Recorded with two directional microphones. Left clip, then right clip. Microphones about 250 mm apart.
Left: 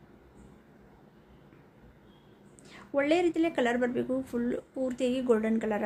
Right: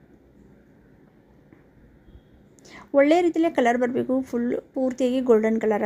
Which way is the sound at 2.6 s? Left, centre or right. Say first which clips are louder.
Right 9 dB; right.